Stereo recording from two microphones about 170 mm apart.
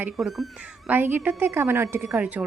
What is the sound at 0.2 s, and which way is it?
Speech, centre (ahead or behind).